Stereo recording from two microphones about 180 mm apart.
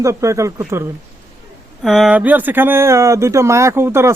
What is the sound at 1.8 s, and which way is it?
Speech, centre (ahead or behind).